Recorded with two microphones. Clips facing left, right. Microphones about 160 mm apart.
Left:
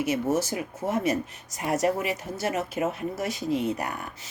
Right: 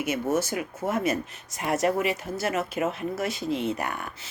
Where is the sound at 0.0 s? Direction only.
35° left (ahead or behind).